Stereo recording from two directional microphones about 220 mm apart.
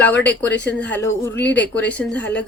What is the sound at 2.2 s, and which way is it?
Speech, 50° left (ahead or behind).